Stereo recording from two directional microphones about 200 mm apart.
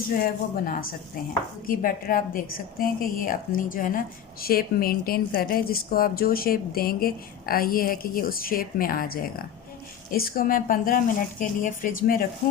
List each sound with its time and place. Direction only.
0.1 s a woman's voice: 45° left (ahead or behind)